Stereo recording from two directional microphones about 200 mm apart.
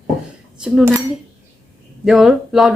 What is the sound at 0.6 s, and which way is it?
Speech, centre (ahead or behind).